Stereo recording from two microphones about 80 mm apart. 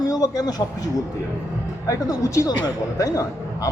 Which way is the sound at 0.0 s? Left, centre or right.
Left.